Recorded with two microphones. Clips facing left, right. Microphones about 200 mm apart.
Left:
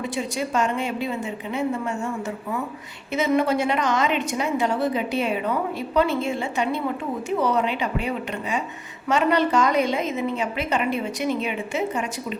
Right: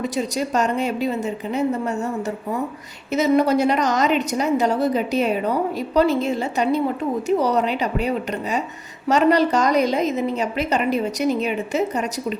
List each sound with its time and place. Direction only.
0.0 s a woman's voice: 40° right (ahead or behind)